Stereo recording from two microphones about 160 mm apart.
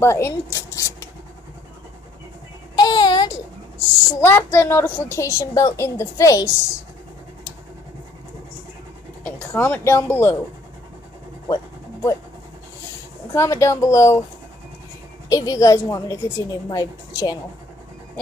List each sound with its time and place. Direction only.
0.0 s a woman's voice: 15° left (ahead or behind)
2.8 s a sound: 25° left (ahead or behind)
4.2 s a woman's voice: 15° left (ahead or behind)
9.5 s a woman's voice: 15° left (ahead or behind)
11.4 s vehicle: 25° left (ahead or behind)
13.3 s a woman's voice: 20° left (ahead or behind)
15.2 s a woman's voice: 20° left (ahead or behind)